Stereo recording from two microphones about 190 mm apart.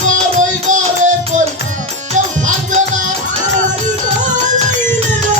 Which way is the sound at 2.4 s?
40° right (ahead or behind).